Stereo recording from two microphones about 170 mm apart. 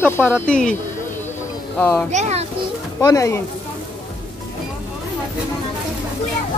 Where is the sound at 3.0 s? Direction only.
20° left (ahead or behind).